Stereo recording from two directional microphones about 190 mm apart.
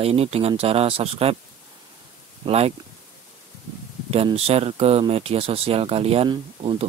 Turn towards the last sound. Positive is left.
turn(degrees=-25)  # may be behind; listen again after turning